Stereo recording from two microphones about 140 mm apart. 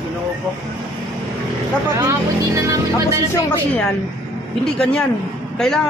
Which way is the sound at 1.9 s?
25° right (ahead or behind).